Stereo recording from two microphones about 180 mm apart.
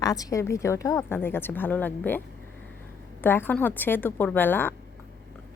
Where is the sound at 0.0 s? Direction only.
20° left (ahead or behind).